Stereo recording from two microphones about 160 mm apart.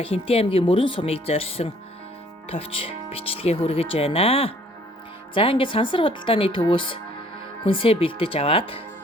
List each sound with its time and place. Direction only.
0.0 s speech: 35° left (ahead or behind)